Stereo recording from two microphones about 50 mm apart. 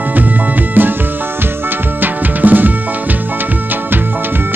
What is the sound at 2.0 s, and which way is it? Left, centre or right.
Music, right.